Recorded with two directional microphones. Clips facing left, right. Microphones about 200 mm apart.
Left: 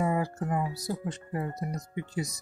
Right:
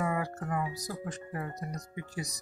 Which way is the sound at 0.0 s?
25° left (ahead or behind).